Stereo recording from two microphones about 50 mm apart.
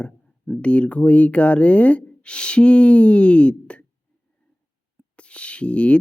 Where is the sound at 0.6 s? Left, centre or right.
Left.